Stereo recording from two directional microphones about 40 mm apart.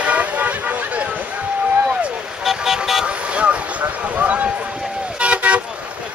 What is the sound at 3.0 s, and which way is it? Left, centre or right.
Vehicle, right.